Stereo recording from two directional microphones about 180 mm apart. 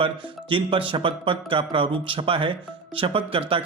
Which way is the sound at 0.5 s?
30° right (ahead or behind).